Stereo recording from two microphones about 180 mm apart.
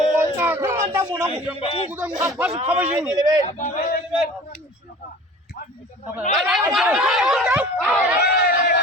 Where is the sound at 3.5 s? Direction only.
45° left (ahead or behind).